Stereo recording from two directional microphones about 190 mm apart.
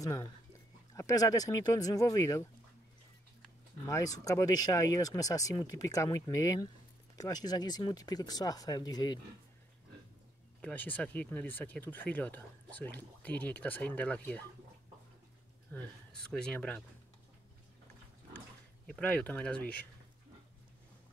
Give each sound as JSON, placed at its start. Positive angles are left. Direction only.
{"t": 0.0, "sound": "speech", "side_deg": 15}
{"t": 3.8, "sound": "speech", "side_deg": 20}
{"t": 10.6, "sound": "speech", "side_deg": 10}
{"t": 16.3, "sound": "speech", "side_deg": 5}
{"t": 18.9, "sound": "speech", "side_deg": 5}